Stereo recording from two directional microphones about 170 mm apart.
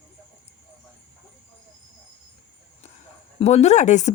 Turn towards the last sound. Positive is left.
turn(degrees=45)  # may be behind; listen again after turning